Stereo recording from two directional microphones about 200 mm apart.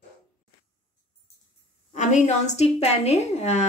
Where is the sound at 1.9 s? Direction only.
35° left (ahead or behind).